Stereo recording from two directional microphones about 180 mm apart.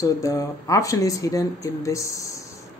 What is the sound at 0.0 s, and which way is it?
Speech, 20° left (ahead or behind).